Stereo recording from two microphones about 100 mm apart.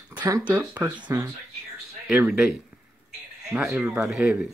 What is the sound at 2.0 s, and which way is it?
Speech, 10° right (ahead or behind).